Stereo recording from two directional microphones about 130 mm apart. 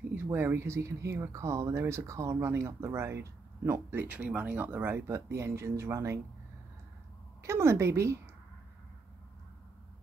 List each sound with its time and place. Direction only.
0.1 s speech: 15° right (ahead or behind)
7.4 s speech: 20° right (ahead or behind)